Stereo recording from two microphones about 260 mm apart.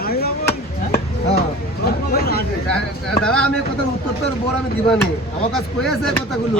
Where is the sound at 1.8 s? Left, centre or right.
Left.